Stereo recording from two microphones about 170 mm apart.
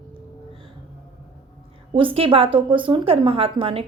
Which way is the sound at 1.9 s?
30° right (ahead or behind).